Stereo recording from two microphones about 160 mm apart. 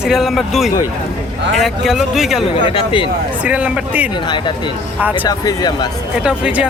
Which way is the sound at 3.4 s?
10° right (ahead or behind).